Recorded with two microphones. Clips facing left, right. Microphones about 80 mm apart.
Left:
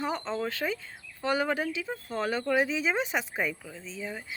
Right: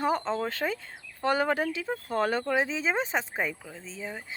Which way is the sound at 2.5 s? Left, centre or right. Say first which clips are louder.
Left 1 dB; right.